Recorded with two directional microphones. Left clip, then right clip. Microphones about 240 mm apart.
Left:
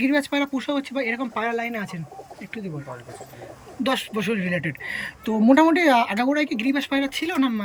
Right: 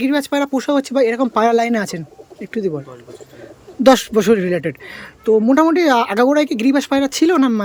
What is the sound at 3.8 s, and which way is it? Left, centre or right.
A man's voice, centre.